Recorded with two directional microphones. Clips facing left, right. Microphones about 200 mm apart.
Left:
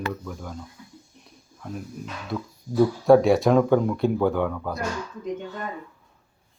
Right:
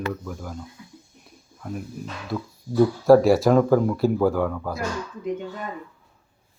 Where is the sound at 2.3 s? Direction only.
Centre (ahead or behind).